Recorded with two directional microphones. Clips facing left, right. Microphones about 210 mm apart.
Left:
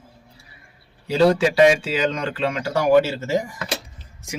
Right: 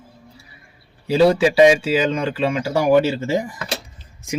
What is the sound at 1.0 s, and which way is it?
Speech, 10° right (ahead or behind).